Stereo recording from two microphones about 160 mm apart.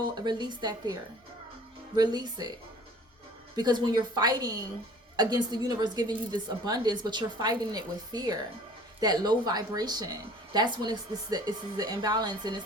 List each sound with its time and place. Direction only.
0.1 s speech: 25° right (ahead or behind)
2.0 s speech: 25° right (ahead or behind)
3.5 s a woman's voice: 25° right (ahead or behind)